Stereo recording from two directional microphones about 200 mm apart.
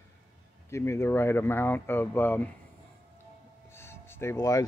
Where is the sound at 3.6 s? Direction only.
10° left (ahead or behind).